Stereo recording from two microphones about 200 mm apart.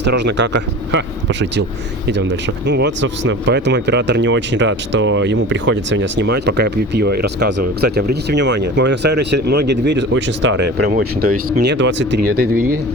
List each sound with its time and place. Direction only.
0.0 s speech: 60° right (ahead or behind)